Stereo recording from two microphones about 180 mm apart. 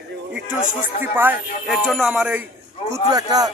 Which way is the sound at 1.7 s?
Centre (ahead or behind).